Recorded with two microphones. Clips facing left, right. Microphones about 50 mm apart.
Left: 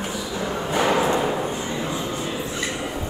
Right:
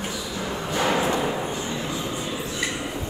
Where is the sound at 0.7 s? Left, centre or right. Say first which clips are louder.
Left 3 dB; left.